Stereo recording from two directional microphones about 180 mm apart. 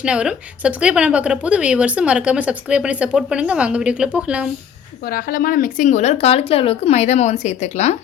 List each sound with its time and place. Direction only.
0.0 s a woman's voice: 5° right (ahead or behind)
5.0 s a woman's voice: 55° left (ahead or behind); by 7.9 s 40° left (ahead or behind)